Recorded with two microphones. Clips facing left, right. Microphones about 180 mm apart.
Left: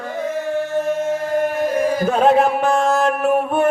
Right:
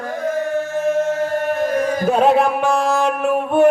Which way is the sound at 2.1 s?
5° right (ahead or behind).